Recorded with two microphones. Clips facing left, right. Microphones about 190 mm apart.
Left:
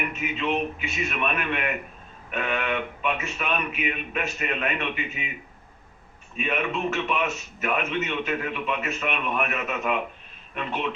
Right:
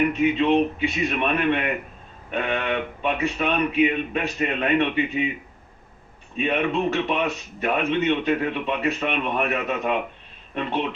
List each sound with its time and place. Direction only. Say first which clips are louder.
0.1 s a man's voice: right 8 dB; 35° right (ahead or behind)
6.3 s a man's voice: right 5 dB; 35° right (ahead or behind)